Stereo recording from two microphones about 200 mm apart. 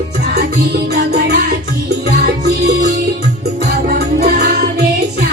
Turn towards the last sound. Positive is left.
turn(degrees=-55)  # may be behind; listen again after turning